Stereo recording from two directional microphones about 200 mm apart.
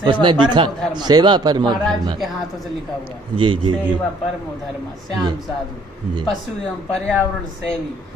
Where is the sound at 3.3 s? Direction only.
25° right (ahead or behind).